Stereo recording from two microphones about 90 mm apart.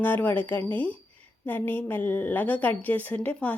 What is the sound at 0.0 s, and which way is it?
A woman's voice, 25° left (ahead or behind).